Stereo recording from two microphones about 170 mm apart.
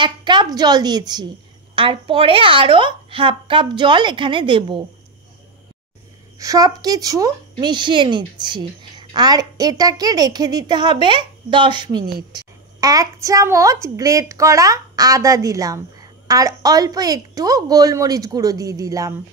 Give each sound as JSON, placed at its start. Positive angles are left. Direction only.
{"t": 0.0, "sound": "a woman's voice", "side_deg": -25}
{"t": 6.3, "sound": "a woman's voice", "side_deg": -20}